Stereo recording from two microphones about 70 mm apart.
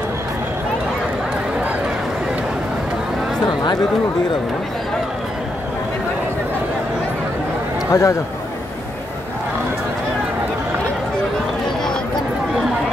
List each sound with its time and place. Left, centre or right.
7.9 s speech: left